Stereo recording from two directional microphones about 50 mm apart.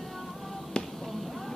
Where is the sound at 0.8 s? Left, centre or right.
Centre.